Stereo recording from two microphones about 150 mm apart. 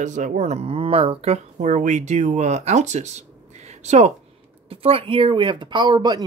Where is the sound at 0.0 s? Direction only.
55° right (ahead or behind).